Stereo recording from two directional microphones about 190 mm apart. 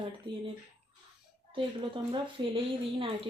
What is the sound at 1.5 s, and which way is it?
Speech, 25° right (ahead or behind).